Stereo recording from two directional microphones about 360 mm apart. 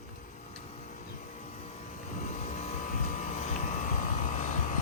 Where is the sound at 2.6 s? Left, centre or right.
Centre.